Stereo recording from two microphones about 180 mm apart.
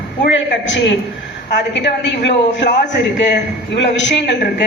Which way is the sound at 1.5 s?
75° left (ahead or behind).